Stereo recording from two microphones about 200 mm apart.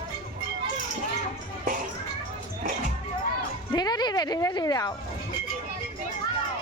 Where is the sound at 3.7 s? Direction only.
20° left (ahead or behind).